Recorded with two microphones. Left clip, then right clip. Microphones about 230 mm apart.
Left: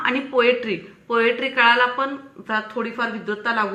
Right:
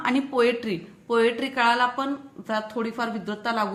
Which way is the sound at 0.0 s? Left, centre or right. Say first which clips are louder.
Left 4 dB; right.